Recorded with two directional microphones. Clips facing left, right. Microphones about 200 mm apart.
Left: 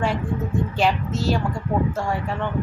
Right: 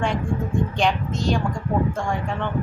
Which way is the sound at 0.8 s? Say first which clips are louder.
Left 3 dB; 5° left (ahead or behind).